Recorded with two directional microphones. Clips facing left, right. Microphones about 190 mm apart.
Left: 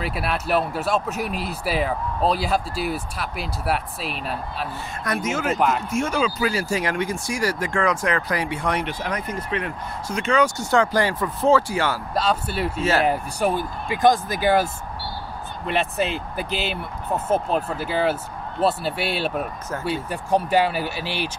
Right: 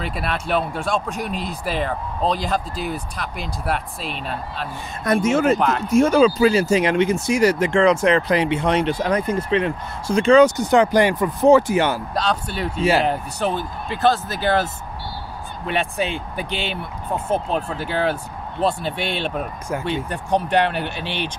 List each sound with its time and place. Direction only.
0.0 s speech: 5° left (ahead or behind)
5.0 s speech: 30° right (ahead or behind)
5.6 s speech: 5° left (ahead or behind)
5.9 s speech: 35° right (ahead or behind); by 12.0 s 20° right (ahead or behind)
12.1 s speech: 5° left (ahead or behind)